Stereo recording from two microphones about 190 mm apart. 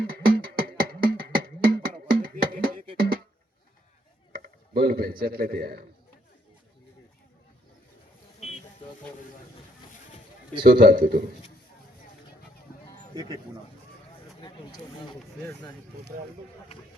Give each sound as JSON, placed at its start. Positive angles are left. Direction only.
{"t": 0.0, "sound": "music", "side_deg": -50}
{"t": 2.2, "sound": "a sound", "side_deg": -50}
{"t": 3.0, "sound": "music", "side_deg": -55}
{"t": 4.3, "sound": "a man's voice", "side_deg": -50}
{"t": 10.7, "sound": "a man's voice", "side_deg": -50}
{"t": 13.1, "sound": "speech", "side_deg": -20}